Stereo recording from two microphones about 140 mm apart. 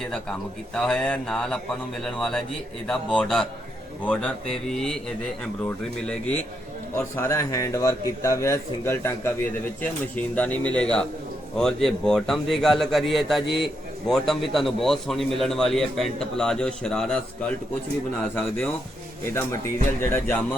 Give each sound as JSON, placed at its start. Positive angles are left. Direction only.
{"t": 0.1, "sound": "a man's voice", "side_deg": 5}
{"t": 6.9, "sound": "a man's voice", "side_deg": 20}
{"t": 19.3, "sound": "a man's voice", "side_deg": 20}